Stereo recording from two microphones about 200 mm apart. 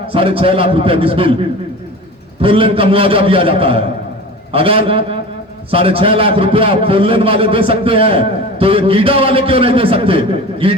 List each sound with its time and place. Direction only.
0.1 s a man's voice: 25° right (ahead or behind)
2.4 s a man's voice: 25° right (ahead or behind)